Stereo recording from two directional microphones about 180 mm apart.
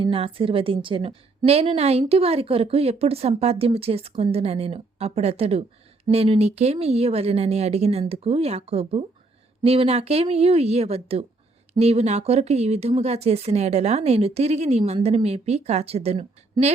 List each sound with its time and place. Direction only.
0.0 s a woman's voice: 30° right (ahead or behind)